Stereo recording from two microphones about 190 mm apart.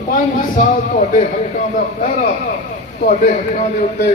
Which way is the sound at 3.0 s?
40° left (ahead or behind).